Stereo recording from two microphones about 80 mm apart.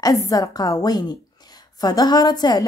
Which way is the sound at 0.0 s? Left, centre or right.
Left.